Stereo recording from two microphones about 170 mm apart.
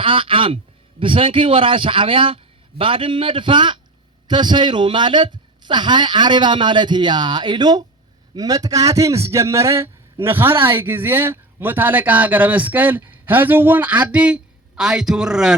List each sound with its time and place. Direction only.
0.0 s a man's voice: 30° right (ahead or behind); by 15.5 s 5° right (ahead or behind)